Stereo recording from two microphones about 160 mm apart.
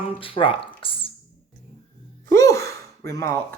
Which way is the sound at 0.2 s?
35° left (ahead or behind).